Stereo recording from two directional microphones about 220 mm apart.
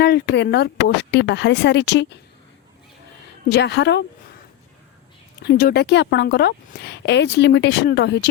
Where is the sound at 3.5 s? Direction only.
50° left (ahead or behind).